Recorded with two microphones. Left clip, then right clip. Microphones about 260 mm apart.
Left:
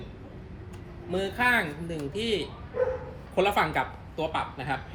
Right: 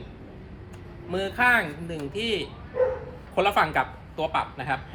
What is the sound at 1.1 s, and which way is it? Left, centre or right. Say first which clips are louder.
A man's voice: right 3 dB; centre.